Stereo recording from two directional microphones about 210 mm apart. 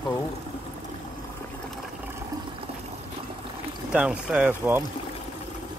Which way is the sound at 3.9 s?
5° right (ahead or behind).